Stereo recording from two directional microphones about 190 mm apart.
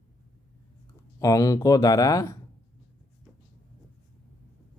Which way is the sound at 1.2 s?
15° left (ahead or behind).